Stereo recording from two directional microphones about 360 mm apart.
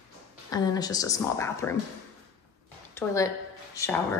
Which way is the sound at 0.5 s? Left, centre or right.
Centre.